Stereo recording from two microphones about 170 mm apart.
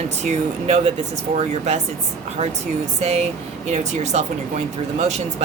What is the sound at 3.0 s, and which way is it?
Speech, 40° right (ahead or behind).